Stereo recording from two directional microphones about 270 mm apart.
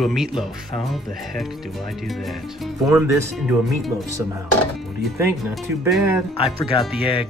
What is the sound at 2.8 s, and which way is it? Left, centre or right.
Speech, centre.